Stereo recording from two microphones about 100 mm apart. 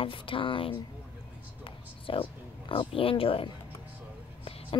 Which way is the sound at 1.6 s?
60° left (ahead or behind).